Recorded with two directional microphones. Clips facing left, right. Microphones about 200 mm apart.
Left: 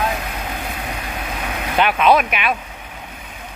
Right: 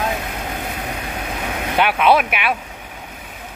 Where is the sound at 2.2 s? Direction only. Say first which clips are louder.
Even; 10° right (ahead or behind).